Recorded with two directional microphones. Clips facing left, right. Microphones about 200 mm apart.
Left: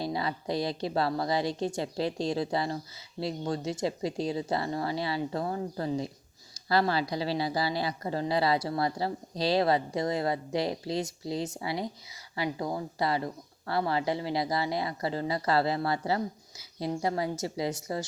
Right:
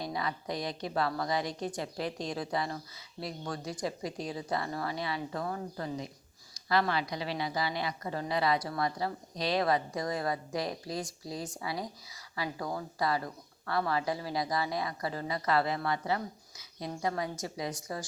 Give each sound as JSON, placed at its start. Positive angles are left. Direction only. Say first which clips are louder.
{"t": 0.0, "sound": "a woman's voice", "louder": "left 4 dB", "side_deg": 30}